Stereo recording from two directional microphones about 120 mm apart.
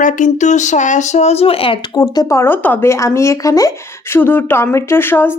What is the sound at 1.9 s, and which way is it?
Speech, 30° left (ahead or behind).